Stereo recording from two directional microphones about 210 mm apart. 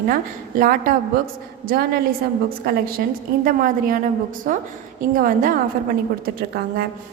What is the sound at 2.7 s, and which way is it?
A woman's voice, 45° right (ahead or behind).